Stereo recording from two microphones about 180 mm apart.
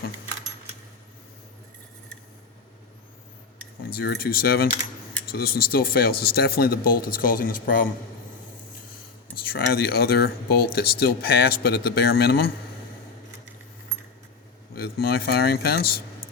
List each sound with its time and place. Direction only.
3.9 s speech: 60° left (ahead or behind)
9.3 s speech: 60° left (ahead or behind)
14.8 s speech: 60° left (ahead or behind)